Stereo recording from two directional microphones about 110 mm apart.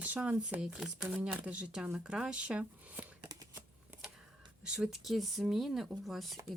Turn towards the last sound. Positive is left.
turn(degrees=0)  # may be behind; listen again after turning